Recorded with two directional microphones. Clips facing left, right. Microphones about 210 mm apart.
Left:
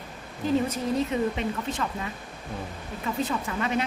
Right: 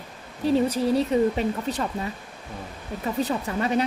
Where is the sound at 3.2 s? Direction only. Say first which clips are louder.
Right 3 dB; 35° right (ahead or behind).